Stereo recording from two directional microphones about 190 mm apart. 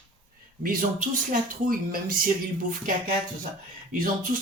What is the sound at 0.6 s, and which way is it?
Speech, 45° right (ahead or behind).